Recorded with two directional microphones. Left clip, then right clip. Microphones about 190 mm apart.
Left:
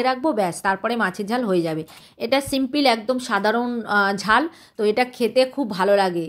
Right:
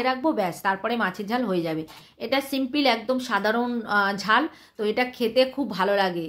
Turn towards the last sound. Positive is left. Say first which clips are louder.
# left 4 dB
turn(degrees=30)  # may be behind; listen again after turning